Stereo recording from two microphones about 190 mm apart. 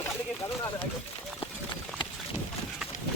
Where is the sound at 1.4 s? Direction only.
30° left (ahead or behind).